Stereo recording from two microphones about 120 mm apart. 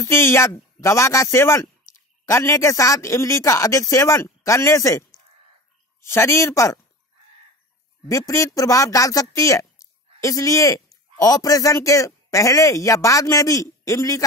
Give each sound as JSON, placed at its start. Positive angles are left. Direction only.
{"t": 0.0, "sound": "speech", "side_deg": 20}
{"t": 8.1, "sound": "speech", "side_deg": 25}